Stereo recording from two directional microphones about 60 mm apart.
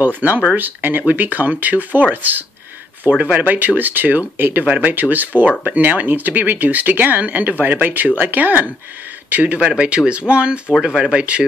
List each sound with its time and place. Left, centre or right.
0.2 s speech: right
3.2 s speech: right
4.6 s speech: right